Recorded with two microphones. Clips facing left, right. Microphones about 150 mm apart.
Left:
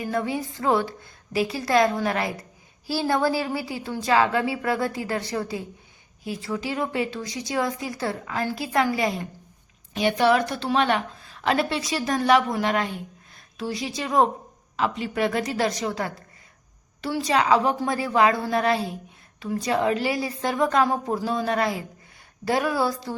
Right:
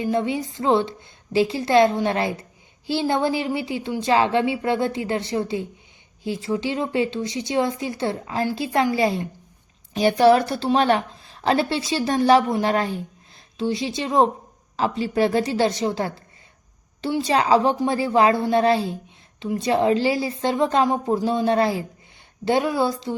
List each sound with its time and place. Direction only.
0.0 s a woman's voice: 25° right (ahead or behind)